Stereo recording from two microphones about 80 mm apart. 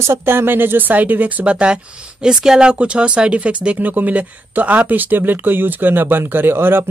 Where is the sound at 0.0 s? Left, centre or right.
Right.